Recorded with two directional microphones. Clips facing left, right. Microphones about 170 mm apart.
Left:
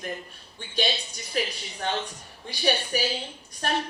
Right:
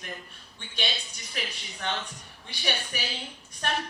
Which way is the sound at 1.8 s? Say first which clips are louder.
Left 4 dB; 35° left (ahead or behind).